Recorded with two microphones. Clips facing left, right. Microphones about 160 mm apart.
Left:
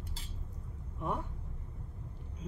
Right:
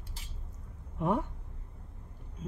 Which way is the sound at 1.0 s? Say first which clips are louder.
Right 7 dB; 70° right (ahead or behind).